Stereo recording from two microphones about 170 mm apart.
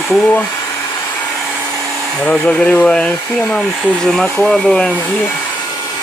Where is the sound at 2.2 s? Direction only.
10° left (ahead or behind).